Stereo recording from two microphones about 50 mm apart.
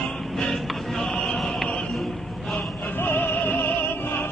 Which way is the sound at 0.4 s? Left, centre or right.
Centre.